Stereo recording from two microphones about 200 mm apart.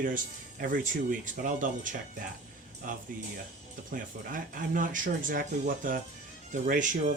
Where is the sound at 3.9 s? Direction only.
45° right (ahead or behind).